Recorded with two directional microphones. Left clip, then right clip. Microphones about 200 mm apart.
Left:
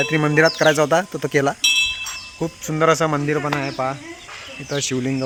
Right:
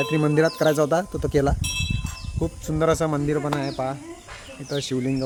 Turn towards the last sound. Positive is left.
turn(degrees=15)  # may be behind; listen again after turning